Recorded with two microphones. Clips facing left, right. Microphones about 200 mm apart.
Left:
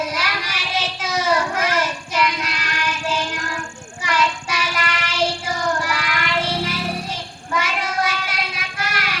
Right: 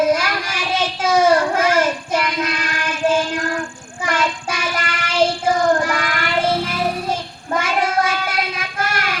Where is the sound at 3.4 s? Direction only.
55° right (ahead or behind).